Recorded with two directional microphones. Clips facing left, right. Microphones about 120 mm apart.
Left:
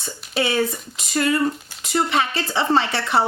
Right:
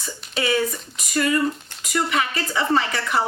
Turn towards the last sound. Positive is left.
turn(degrees=30)  # may be behind; listen again after turning